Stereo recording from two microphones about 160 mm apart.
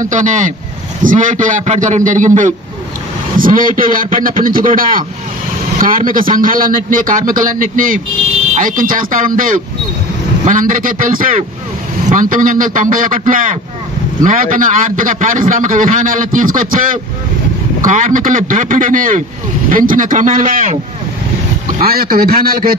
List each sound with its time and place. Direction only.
0.0 s a man's voice: 50° right (ahead or behind)
21.7 s a man's voice: 65° right (ahead or behind)